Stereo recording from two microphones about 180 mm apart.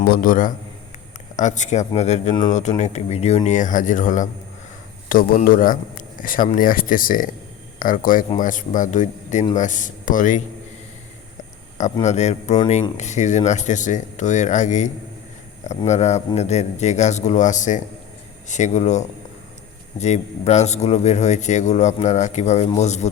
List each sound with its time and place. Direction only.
0.0 s a man's voice: 55° left (ahead or behind)
12.0 s a man's voice: 40° left (ahead or behind)